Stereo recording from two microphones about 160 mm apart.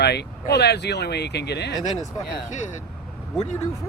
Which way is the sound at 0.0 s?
90° left.